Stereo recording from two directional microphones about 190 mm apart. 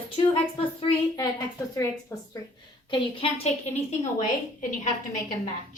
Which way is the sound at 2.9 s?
25° left (ahead or behind).